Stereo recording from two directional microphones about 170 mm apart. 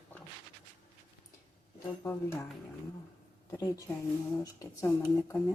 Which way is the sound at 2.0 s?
15° left (ahead or behind).